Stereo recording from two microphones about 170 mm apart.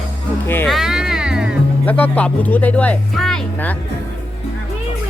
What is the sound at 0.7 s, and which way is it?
Music, 5° right (ahead or behind).